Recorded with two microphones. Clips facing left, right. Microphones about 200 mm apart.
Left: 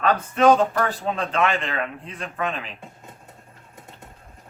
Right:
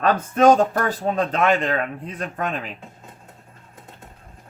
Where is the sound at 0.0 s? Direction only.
45° right (ahead or behind).